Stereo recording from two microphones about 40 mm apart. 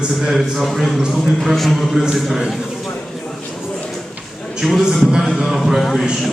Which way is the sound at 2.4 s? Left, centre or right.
Centre.